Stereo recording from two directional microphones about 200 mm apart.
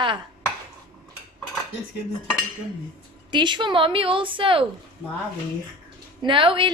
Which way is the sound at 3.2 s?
20° right (ahead or behind).